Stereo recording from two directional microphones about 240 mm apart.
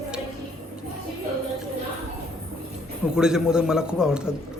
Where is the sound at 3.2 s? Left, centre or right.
Centre.